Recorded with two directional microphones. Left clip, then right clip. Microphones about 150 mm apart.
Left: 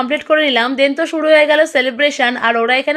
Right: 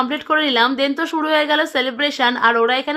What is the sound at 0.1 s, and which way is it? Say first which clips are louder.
A woman's voice: left 4 dB; 10° left (ahead or behind).